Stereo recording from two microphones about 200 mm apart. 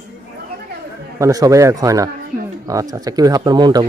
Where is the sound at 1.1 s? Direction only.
15° right (ahead or behind).